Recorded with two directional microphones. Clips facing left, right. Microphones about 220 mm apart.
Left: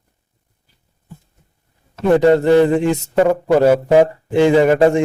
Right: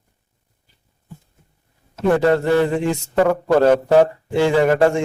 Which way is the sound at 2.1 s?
20° left (ahead or behind).